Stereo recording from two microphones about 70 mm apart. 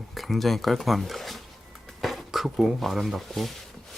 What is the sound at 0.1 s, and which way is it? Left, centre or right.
Speech, centre.